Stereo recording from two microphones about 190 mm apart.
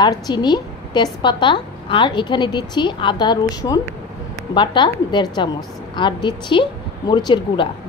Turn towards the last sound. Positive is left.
turn(degrees=25)  # may be behind; listen again after turning